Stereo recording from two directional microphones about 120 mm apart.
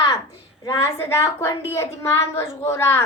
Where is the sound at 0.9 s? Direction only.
20° left (ahead or behind).